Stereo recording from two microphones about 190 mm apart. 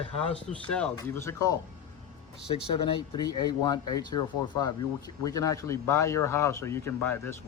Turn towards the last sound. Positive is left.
turn(degrees=10)  # may be behind; listen again after turning